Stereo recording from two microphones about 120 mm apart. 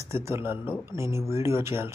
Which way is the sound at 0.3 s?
20° right (ahead or behind).